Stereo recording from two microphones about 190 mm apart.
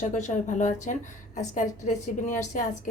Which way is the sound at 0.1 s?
40° left (ahead or behind).